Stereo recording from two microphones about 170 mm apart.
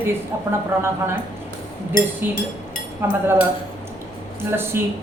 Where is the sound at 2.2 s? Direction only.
10° right (ahead or behind).